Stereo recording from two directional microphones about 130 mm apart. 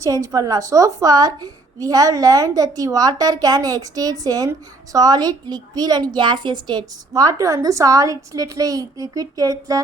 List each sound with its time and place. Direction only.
0.0 s a woman's voice: 25° right (ahead or behind)